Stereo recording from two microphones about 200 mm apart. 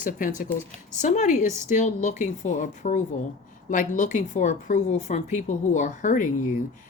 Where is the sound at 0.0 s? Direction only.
40° left (ahead or behind).